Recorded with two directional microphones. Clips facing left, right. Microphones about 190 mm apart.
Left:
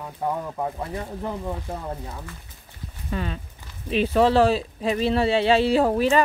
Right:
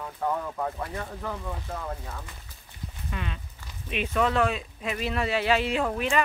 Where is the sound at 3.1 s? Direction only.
35° left (ahead or behind).